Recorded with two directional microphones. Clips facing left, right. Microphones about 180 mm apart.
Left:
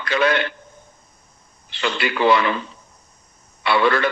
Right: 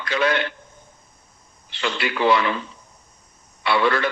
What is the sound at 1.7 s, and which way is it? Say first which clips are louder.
Speech: left 2 dB; 65° left (ahead or behind).